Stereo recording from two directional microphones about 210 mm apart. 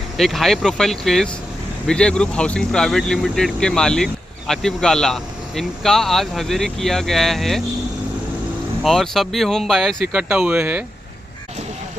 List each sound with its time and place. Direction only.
0.2 s speech: centre (ahead or behind)
8.8 s speech: centre (ahead or behind)